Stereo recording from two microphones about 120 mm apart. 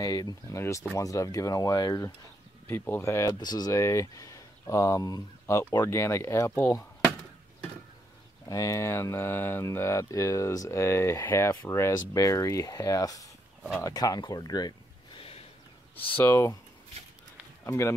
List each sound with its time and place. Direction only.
0.0 s speech: 30° left (ahead or behind)
2.6 s speech: 20° left (ahead or behind)
8.5 s speech: 25° left (ahead or behind)
16.2 s speech: 20° left (ahead or behind)
17.6 s speech: 25° left (ahead or behind)